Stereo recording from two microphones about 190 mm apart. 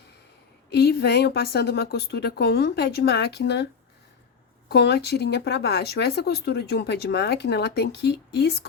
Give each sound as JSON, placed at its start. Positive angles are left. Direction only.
{"t": 0.7, "sound": "speech", "side_deg": 60}
{"t": 4.7, "sound": "speech", "side_deg": 60}